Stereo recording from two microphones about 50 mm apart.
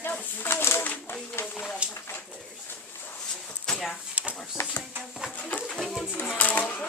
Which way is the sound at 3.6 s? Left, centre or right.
Centre.